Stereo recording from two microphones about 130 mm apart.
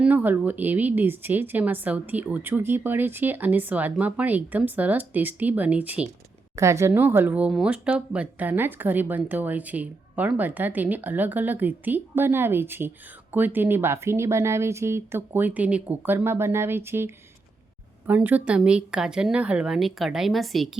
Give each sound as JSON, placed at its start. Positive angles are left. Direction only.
{"t": 0.0, "sound": "speech", "side_deg": -15}
{"t": 6.6, "sound": "speech", "side_deg": -20}